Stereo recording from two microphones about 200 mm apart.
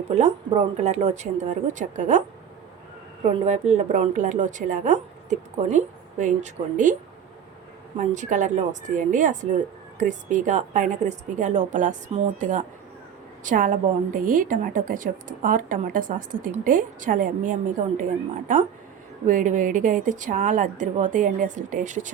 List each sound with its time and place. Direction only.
0.1 s a woman's voice: 35° right (ahead or behind)
3.2 s a woman's voice: 35° right (ahead or behind)
7.9 s a woman's voice: 35° right (ahead or behind)
19.2 s a woman's voice: 40° right (ahead or behind)